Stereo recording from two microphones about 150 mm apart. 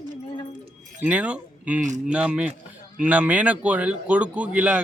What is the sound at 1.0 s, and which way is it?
A man's voice, 10° right (ahead or behind).